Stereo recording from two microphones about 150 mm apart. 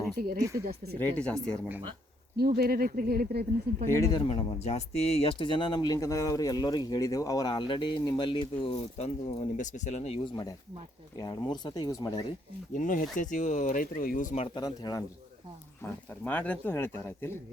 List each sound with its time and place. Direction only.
0.3 s speech: 20° right (ahead or behind)
0.6 s speech: 90° right
0.9 s speech: 10° left (ahead or behind)
2.3 s speech: 90° right
3.8 s speech: 20° left (ahead or behind)
4.3 s speech: 45° left (ahead or behind)
11.2 s speech: 30° left (ahead or behind)
12.7 s speech: 65° left (ahead or behind)
14.4 s speech: 30° left (ahead or behind)
15.8 s speech: 10° left (ahead or behind)